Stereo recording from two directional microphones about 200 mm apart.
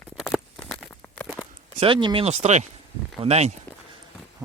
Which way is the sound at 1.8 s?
25° right (ahead or behind).